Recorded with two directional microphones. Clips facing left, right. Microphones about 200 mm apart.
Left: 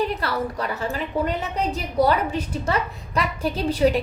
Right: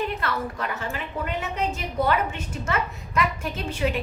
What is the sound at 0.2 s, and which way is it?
A woman's voice, 35° left (ahead or behind).